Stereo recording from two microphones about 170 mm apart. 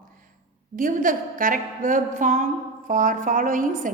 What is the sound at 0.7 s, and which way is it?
A woman's voice, 50° right (ahead or behind).